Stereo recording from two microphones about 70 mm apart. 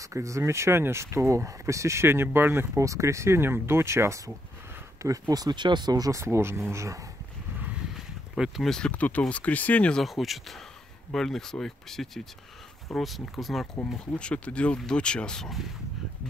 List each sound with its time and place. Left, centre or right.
0.0 s speech: right
2.8 s speech: right
5.3 s speech: right
8.6 s speech: centre
8.9 s speech: left
9.9 s speech: centre
14.1 s speech: centre